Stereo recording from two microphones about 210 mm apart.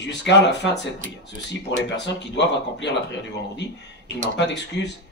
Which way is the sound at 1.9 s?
55° left (ahead or behind).